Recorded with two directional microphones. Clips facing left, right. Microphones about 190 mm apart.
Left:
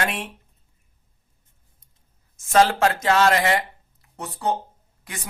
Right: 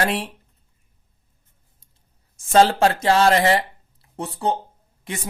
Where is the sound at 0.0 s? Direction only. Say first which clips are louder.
Right 4 dB; 35° right (ahead or behind).